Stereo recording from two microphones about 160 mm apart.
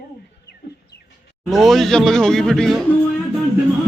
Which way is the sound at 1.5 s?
Centre (ahead or behind).